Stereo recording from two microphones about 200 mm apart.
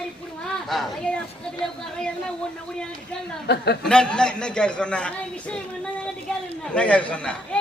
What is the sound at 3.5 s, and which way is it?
Speech, 55° left (ahead or behind).